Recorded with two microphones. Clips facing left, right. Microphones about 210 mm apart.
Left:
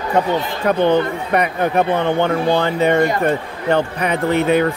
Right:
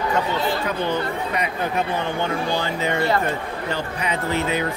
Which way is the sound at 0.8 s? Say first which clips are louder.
Left 8 dB; 60° left (ahead or behind).